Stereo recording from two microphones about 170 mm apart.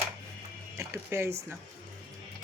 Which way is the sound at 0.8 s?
15° right (ahead or behind).